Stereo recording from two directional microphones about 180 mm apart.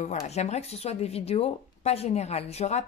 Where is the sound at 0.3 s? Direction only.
40° left (ahead or behind).